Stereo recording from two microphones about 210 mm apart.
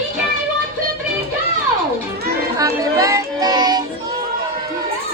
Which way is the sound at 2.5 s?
15° right (ahead or behind).